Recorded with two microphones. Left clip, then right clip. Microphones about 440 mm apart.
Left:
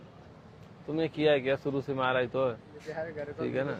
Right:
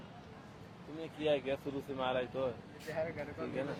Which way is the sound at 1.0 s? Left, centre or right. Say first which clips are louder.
Left 8 dB; left.